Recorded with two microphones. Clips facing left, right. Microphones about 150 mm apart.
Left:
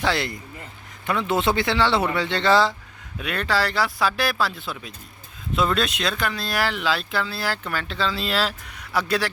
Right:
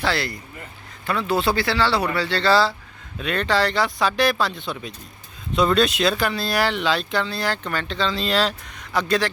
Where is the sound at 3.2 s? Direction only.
5° left (ahead or behind).